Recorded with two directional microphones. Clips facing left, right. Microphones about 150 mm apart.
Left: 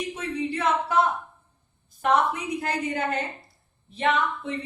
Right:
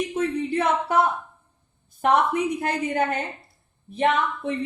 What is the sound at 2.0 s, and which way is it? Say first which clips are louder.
Speech: right 3 dB; 60° right (ahead or behind).